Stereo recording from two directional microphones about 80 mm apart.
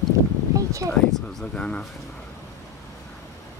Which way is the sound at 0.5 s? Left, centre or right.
Right.